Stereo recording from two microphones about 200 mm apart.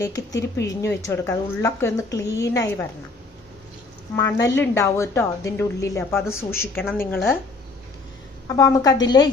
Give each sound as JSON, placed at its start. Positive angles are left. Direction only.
{"t": 0.0, "sound": "a woman's voice", "side_deg": 15}
{"t": 4.1, "sound": "a woman's voice", "side_deg": 15}
{"t": 8.5, "sound": "a woman's voice", "side_deg": 15}